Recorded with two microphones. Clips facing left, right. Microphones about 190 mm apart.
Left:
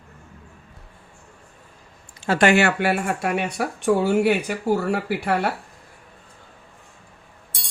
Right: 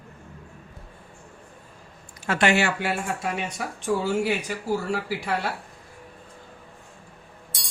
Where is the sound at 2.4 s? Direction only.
55° left (ahead or behind).